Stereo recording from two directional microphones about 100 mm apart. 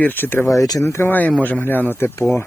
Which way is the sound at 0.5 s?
35° left (ahead or behind).